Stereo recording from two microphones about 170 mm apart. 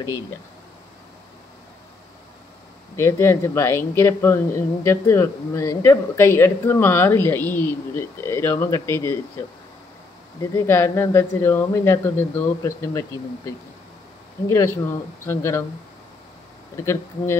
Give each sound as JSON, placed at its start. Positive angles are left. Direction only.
{"t": 3.0, "sound": "a woman's voice", "side_deg": 15}
{"t": 10.5, "sound": "a woman's voice", "side_deg": 15}
{"t": 16.7, "sound": "a woman's voice", "side_deg": 15}